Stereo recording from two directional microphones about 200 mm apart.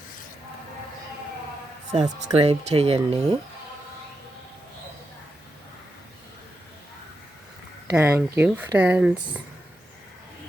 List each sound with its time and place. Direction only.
2.0 s speech: 30° right (ahead or behind)
7.9 s speech: 10° right (ahead or behind)